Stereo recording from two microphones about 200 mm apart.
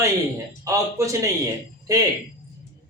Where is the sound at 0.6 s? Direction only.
15° right (ahead or behind).